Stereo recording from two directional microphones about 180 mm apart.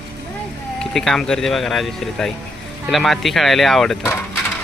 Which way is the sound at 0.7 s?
Centre (ahead or behind).